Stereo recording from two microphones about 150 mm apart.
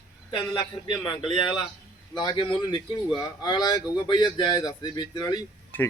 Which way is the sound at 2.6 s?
30° left (ahead or behind).